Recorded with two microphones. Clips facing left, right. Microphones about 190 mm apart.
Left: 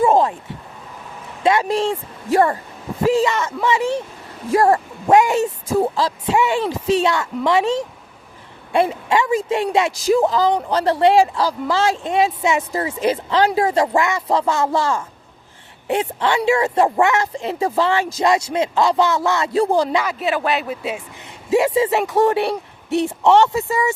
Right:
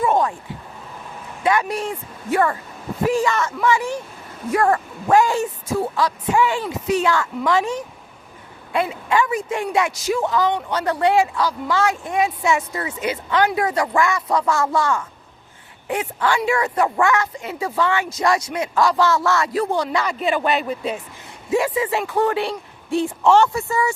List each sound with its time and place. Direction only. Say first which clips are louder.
0.0 s vehicle: left 4 dB; 30° left (ahead or behind)
1.5 s speech: left 4 dB; 25° left (ahead or behind)
20.1 s speech: even; 5° left (ahead or behind)
21.5 s speech: left 4 dB; 25° left (ahead or behind)
22.4 s a sound: left 4 dB; 70° left (ahead or behind)
23.0 s speech: left 1 dB; 20° left (ahead or behind)